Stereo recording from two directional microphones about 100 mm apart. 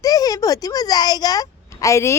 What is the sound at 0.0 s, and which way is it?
Speech, 40° left (ahead or behind).